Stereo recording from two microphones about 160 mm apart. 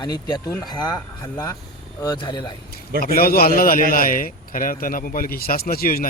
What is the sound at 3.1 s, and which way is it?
Speech, 65° left (ahead or behind).